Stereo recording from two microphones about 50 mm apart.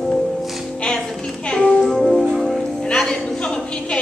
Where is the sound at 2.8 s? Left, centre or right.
Centre.